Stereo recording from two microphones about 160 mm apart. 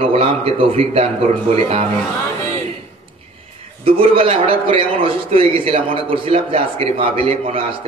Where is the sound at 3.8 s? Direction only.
35° right (ahead or behind).